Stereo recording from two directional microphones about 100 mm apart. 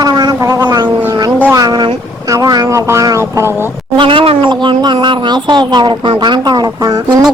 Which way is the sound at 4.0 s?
65° right (ahead or behind).